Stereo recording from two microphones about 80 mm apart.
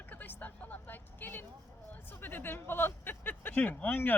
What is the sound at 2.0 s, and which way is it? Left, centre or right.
Speech, left.